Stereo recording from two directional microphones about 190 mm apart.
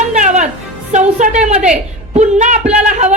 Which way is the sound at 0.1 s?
40° right (ahead or behind).